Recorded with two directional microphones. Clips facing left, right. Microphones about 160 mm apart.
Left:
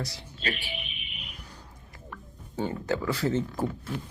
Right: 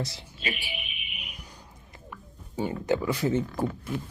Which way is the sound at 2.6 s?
15° right (ahead or behind).